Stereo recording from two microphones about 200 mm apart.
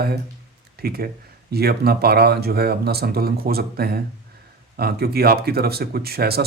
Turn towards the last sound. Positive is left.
turn(degrees=-50)  # may be behind; listen again after turning